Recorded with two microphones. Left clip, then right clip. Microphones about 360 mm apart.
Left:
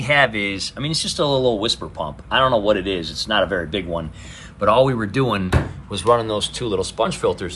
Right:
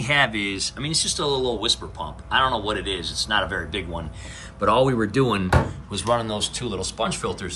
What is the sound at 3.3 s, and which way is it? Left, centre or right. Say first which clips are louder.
Speech: left 5 dB; centre.